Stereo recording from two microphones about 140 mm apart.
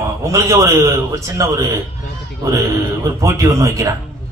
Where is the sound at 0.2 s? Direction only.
25° right (ahead or behind).